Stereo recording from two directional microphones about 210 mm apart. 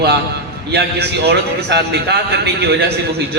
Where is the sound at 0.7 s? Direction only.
50° right (ahead or behind).